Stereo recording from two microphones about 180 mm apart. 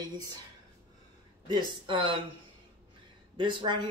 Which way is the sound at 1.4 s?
25° right (ahead or behind).